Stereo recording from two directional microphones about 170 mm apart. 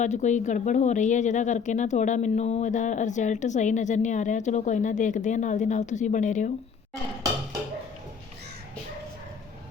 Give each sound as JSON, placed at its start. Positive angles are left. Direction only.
{"t": 0.0, "sound": "a woman's voice", "side_deg": 45}